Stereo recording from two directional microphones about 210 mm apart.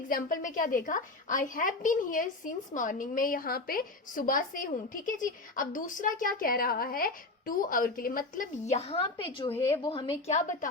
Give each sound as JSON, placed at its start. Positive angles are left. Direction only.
{"t": 0.1, "sound": "a woman's voice", "side_deg": 40}